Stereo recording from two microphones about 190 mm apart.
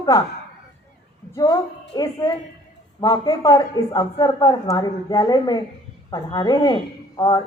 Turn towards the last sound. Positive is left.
turn(degrees=20)  # may be behind; listen again after turning